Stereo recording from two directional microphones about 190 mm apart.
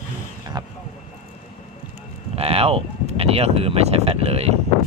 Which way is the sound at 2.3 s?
30° right (ahead or behind).